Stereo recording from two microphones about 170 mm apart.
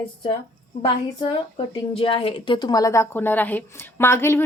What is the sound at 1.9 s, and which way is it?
A woman's voice, 30° left (ahead or behind).